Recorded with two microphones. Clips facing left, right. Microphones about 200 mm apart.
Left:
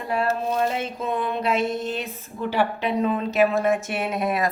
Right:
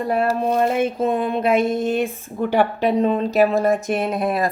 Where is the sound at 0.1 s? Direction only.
50° right (ahead or behind).